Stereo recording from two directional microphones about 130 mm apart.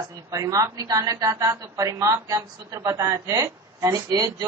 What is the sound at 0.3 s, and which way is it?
A woman's voice, 25° right (ahead or behind).